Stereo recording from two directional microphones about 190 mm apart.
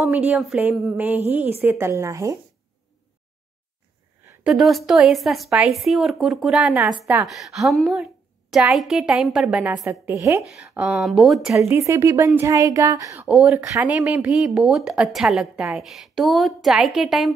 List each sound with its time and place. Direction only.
0.0 s speech: 5° right (ahead or behind)
4.5 s a woman's voice: centre (ahead or behind)
10.8 s a woman's voice: 5° right (ahead or behind)
11.5 s speech: 15° right (ahead or behind)
13.2 s a woman's voice: 5° right (ahead or behind)